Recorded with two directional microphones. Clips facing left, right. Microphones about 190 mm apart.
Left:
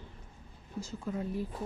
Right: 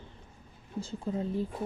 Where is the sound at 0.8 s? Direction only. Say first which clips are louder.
Right 3 dB; 30° right (ahead or behind).